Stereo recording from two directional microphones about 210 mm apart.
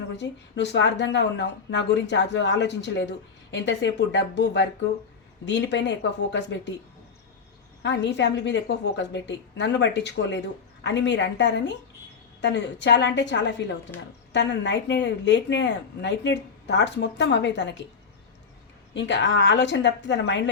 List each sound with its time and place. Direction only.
0.2 s speech: 55° left (ahead or behind)
7.8 s speech: 55° left (ahead or behind)
13.9 s speech: 10° left (ahead or behind)
14.3 s speech: 55° left (ahead or behind)
18.9 s speech: 60° left (ahead or behind)